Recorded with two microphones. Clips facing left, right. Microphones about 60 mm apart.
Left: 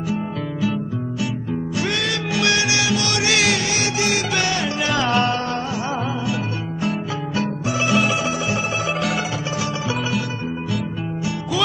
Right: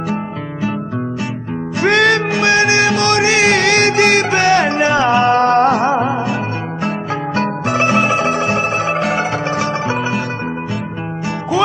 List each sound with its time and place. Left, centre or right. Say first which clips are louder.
1.8 s music: right 13 dB; right
2.3 s music: right 7 dB; right
3.3 s music: right 2 dB; right
3.5 s music: right 10 dB; right
4.8 s music: right 3 dB; right
5.4 s music: right 13 dB; right
5.9 s music: right 8 dB; right
7.3 s zither: right 6 dB; right